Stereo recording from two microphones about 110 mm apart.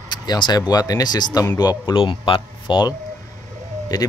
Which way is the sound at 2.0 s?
55° left (ahead or behind).